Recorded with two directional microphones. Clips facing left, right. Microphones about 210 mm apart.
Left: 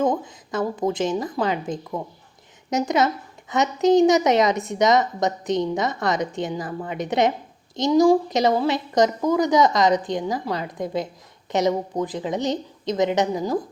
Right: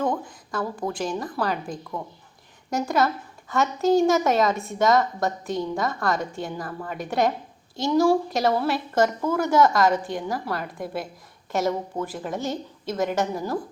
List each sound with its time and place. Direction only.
0.0 s a woman's voice: 20° left (ahead or behind)